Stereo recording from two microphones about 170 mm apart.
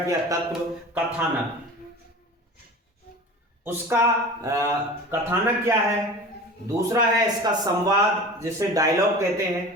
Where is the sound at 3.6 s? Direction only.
15° right (ahead or behind).